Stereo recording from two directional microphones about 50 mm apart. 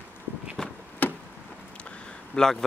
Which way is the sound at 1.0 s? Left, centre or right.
Left.